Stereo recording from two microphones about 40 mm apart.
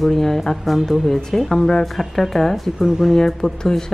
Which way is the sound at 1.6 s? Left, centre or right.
Centre.